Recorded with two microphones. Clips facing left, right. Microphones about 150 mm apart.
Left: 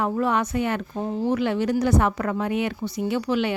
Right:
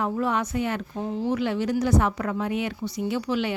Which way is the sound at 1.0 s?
45° left (ahead or behind).